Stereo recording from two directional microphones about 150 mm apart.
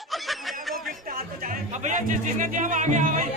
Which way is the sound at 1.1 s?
65° right (ahead or behind).